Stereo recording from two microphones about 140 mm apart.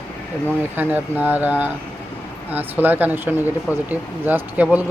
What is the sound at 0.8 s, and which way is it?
Speech, 15° right (ahead or behind).